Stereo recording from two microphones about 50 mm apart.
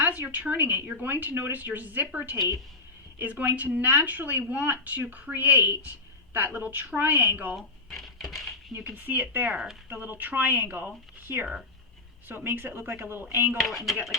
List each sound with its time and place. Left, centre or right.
0.0 s a woman's voice: right
7.0 s speech: right
8.0 s a sound: centre
9.0 s a woman's voice: right
13.6 s speech: centre